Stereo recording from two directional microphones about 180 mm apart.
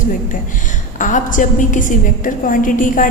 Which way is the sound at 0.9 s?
45° left (ahead or behind).